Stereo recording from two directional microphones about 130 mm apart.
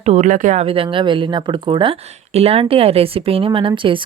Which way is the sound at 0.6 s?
45° right (ahead or behind).